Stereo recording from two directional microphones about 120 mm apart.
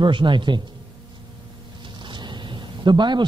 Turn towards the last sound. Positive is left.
turn(degrees=-40)  # may be behind; listen again after turning